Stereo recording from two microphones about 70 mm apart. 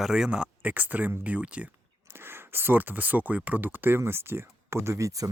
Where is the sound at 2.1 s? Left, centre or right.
Right.